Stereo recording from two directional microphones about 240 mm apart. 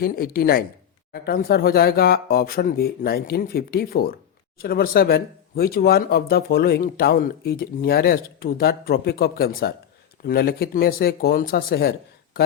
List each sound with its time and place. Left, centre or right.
0.0 s speech: left